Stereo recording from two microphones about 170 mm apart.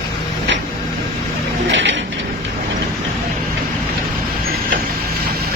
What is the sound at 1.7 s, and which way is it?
Mechanisms, 90° right.